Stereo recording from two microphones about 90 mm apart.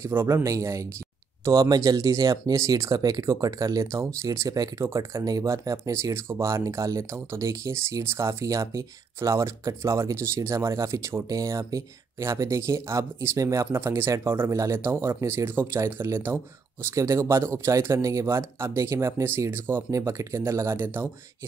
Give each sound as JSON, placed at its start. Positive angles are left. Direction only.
{"t": 0.1, "sound": "speech", "side_deg": -25}
{"t": 0.4, "sound": "speech", "side_deg": -35}